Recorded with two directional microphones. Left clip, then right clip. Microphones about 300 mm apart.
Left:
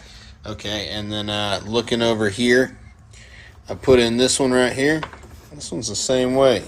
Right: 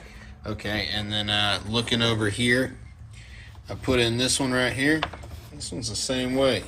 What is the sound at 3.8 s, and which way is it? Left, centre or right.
Speech, left.